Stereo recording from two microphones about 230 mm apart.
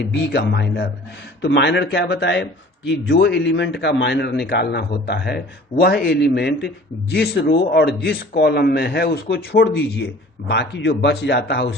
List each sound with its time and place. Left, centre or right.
0.0 s a man's voice: left